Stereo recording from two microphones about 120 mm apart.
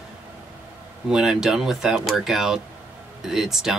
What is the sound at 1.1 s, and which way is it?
Speech, 5° right (ahead or behind).